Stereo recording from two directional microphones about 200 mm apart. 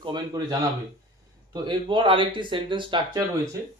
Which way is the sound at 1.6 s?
25° right (ahead or behind).